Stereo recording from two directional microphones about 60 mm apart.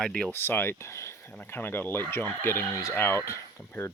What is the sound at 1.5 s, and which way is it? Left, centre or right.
Speech, left.